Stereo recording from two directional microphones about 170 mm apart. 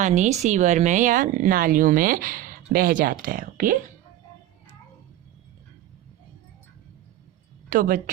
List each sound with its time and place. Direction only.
0.0 s speech: 45° right (ahead or behind)
7.7 s speech: 55° right (ahead or behind)